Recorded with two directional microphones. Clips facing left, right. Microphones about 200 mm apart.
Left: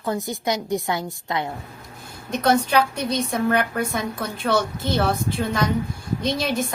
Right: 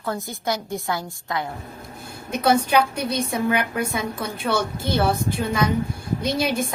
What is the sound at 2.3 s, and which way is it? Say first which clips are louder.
A woman's voice: even; 5° right (ahead or behind).